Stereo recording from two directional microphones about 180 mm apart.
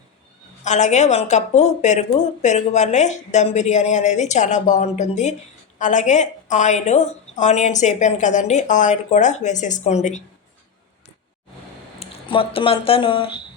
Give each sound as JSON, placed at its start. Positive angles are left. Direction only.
{"t": 0.6, "sound": "a woman's voice", "side_deg": 40}
{"t": 11.9, "sound": "speech", "side_deg": 30}